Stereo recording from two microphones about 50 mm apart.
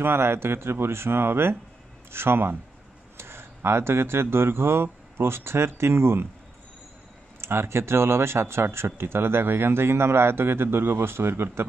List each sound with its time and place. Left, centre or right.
0.0 s speech: right
7.3 s speech: right